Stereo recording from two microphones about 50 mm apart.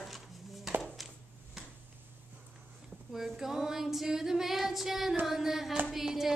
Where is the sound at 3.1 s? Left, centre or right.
Centre.